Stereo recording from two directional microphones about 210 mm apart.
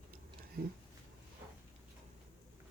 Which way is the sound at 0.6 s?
45° right (ahead or behind).